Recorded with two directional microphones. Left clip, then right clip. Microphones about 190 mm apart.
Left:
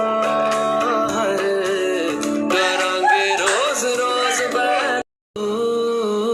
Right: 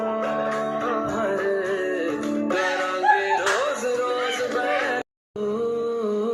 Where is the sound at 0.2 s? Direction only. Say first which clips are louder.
Left 6 dB; 30° left (ahead or behind).